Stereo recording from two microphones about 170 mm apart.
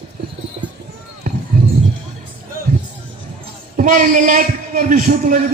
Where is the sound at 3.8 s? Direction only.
50° right (ahead or behind).